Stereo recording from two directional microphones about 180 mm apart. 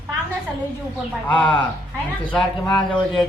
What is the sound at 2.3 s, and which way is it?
Speech, 5° left (ahead or behind).